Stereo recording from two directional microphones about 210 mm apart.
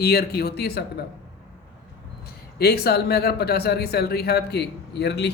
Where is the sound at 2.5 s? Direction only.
50° left (ahead or behind).